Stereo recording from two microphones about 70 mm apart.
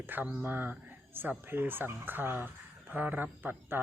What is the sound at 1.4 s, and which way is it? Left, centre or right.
Speech, right.